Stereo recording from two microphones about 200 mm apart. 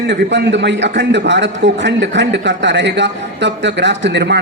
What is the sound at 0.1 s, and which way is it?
A man's voice, 60° right (ahead or behind).